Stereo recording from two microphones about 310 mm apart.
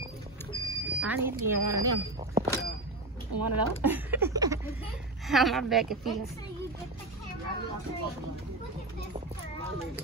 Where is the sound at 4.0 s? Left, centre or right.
Centre.